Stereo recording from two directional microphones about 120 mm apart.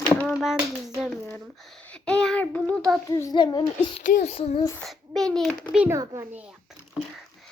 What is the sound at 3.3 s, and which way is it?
Speech, 40° left (ahead or behind).